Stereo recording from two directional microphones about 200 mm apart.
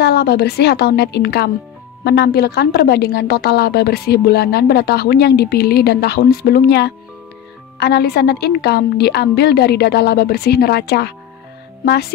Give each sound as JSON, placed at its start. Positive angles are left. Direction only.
{"t": 0.0, "sound": "a woman's voice", "side_deg": 55}